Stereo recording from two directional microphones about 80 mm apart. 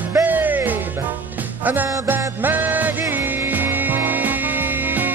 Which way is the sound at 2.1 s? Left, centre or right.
Right.